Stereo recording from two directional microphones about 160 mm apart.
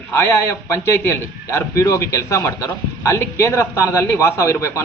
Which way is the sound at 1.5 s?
15° left (ahead or behind).